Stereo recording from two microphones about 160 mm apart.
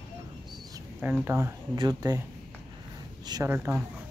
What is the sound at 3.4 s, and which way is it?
Speech, 15° right (ahead or behind).